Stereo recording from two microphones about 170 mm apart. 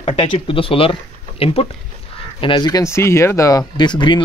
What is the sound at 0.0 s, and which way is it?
Speech, 35° left (ahead or behind).